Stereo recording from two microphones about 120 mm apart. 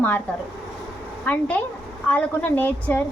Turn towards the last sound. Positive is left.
turn(degrees=15)  # may be behind; listen again after turning